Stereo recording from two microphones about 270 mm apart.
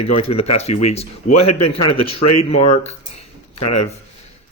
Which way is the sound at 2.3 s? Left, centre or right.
Left.